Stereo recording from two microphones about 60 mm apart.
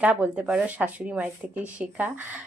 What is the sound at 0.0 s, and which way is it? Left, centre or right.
Speech, right.